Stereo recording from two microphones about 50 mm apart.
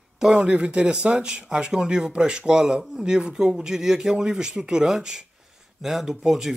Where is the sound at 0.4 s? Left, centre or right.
Right.